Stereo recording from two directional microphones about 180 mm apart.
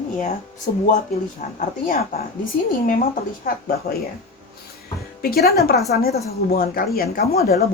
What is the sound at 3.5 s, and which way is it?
Speech, 50° left (ahead or behind).